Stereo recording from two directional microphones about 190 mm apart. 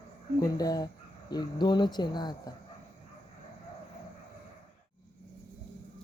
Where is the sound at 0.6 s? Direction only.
20° left (ahead or behind).